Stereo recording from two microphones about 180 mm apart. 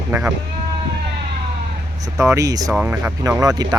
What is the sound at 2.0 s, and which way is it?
Speech, 15° right (ahead or behind).